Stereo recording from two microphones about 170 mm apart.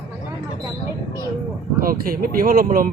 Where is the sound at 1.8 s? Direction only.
55° right (ahead or behind).